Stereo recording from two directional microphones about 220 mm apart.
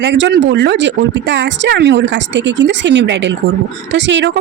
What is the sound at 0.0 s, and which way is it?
Speech, 55° right (ahead or behind).